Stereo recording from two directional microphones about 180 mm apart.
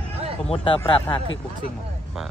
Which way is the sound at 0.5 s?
30° left (ahead or behind).